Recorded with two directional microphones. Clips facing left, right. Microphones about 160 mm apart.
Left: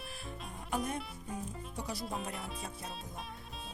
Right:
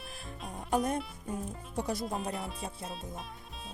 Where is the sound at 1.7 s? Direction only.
50° right (ahead or behind).